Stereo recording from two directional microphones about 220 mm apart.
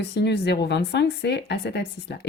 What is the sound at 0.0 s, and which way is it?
Speech, 50° left (ahead or behind).